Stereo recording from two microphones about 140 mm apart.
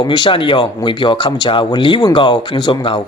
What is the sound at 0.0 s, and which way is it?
A man's voice, 35° left (ahead or behind).